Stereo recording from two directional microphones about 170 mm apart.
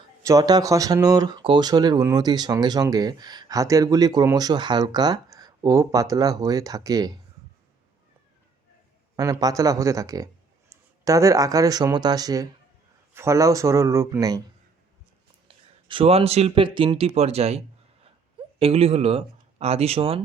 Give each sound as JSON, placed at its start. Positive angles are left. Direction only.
{"t": 0.2, "sound": "speech", "side_deg": -20}
{"t": 9.1, "sound": "speech", "side_deg": -20}
{"t": 15.4, "sound": "speech", "side_deg": -30}
{"t": 18.6, "sound": "speech", "side_deg": -35}